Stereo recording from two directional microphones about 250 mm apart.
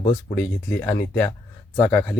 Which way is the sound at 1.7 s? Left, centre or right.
Centre.